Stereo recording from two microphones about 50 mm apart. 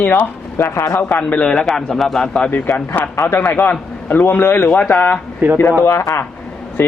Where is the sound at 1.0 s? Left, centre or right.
Left.